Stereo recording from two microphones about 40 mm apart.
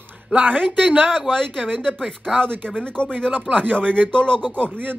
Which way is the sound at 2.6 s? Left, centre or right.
Centre.